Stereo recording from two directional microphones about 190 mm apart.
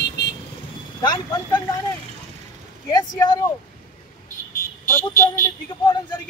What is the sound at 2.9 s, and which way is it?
Speech, 20° left (ahead or behind).